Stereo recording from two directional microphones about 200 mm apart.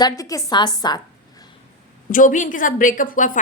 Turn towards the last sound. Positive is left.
turn(degrees=40)  # may be behind; listen again after turning